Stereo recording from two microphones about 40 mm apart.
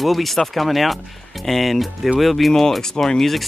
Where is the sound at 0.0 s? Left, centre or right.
Centre.